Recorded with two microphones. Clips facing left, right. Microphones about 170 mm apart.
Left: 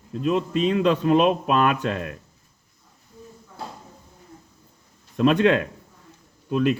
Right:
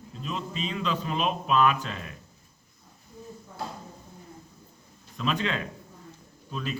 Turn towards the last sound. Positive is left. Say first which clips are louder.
# left 13 dB
turn(degrees=60)  # may be behind; listen again after turning